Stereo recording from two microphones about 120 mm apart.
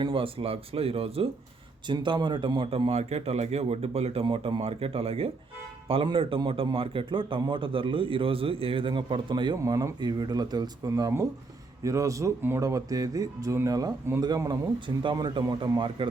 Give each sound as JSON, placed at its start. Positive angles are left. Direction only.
{"t": 0.0, "sound": "a man's voice", "side_deg": -45}
{"t": 1.9, "sound": "a man's voice", "side_deg": -40}
{"t": 9.6, "sound": "speech", "side_deg": -25}